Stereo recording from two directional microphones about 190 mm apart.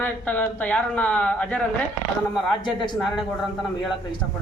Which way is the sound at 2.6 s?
25° left (ahead or behind).